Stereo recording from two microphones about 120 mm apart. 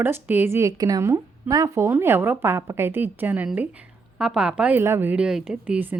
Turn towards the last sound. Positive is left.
turn(degrees=-10)  # may be behind; listen again after turning